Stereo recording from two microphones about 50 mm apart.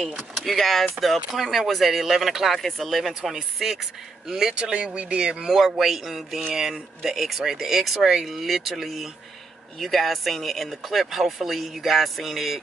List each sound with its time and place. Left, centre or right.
0.0 s speech: centre
4.6 s speech: right
5.6 s speech: centre